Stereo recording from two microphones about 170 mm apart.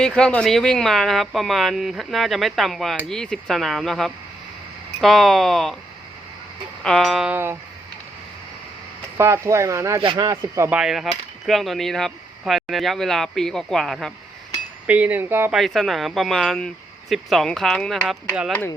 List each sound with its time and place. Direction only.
0.2 s speech: 5° left (ahead or behind)
6.8 s speech: centre (ahead or behind)
9.1 s speech: 15° right (ahead or behind)
10.8 s speech: centre (ahead or behind)
14.8 s speech: 10° right (ahead or behind)
15.5 s speech: centre (ahead or behind)